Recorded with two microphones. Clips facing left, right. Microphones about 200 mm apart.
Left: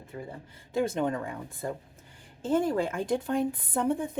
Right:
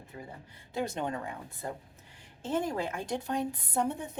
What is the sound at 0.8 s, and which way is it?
Speech, 50° left (ahead or behind).